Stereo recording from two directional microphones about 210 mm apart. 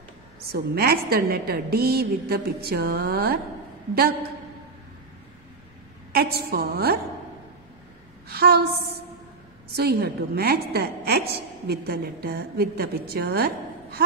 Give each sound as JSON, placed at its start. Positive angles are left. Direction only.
{"t": 0.4, "sound": "a woman's voice", "side_deg": -45}
{"t": 6.1, "sound": "a woman's voice", "side_deg": -50}
{"t": 8.3, "sound": "a woman's voice", "side_deg": -50}